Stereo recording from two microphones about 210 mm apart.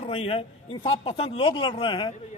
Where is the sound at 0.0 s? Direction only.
25° left (ahead or behind).